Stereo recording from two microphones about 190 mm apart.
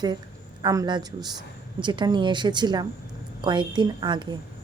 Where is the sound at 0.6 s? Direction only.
20° right (ahead or behind).